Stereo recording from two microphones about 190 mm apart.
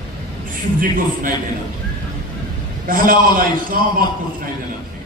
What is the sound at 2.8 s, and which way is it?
A man's voice, 45° right (ahead or behind).